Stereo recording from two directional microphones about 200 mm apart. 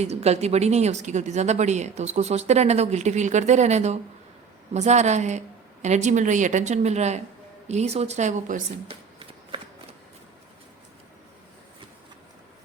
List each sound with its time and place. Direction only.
0.0 s a woman's voice: 35° right (ahead or behind)
8.9 s shuffling cards: 25° right (ahead or behind)